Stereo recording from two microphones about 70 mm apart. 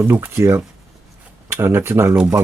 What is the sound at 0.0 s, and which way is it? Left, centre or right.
Speech, right.